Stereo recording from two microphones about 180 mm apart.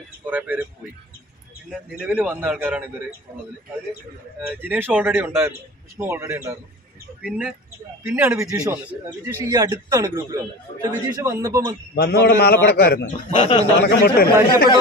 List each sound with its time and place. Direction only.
0.3 s a man's voice: 10° right (ahead or behind)
1.7 s a man's voice: 5° right (ahead or behind)
4.4 s a man's voice: 10° right (ahead or behind)
11.9 s a man's voice: 60° left (ahead or behind)
13.3 s a man's voice: 30° left (ahead or behind)
13.7 s a man's voice: 65° left (ahead or behind)